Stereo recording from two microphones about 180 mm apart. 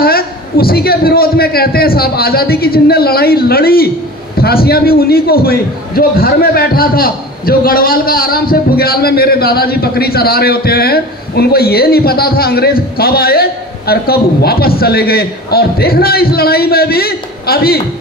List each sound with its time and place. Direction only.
0.0 s a man's voice: 55° left (ahead or behind)